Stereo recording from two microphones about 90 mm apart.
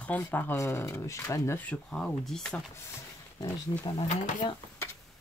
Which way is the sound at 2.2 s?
5° left (ahead or behind).